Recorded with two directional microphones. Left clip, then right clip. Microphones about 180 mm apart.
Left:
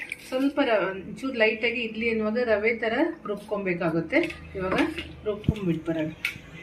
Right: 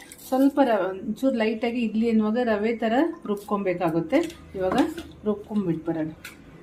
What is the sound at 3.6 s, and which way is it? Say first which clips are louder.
Speech: right 2 dB; 60° right (ahead or behind).